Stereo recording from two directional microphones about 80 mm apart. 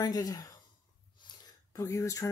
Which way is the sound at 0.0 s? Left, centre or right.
Left.